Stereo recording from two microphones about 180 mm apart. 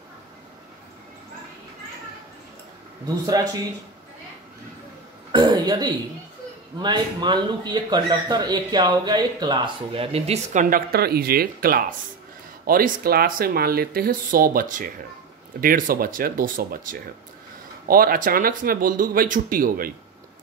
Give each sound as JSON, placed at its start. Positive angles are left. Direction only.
{"t": 5.3, "sound": "throat clearing", "side_deg": -25}
{"t": 6.8, "sound": "speech", "side_deg": -25}